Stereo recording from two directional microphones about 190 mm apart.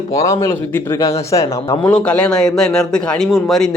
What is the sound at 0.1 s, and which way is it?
A man's voice, 15° left (ahead or behind).